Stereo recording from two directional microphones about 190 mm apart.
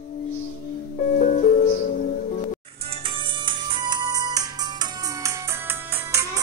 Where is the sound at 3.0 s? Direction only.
25° right (ahead or behind).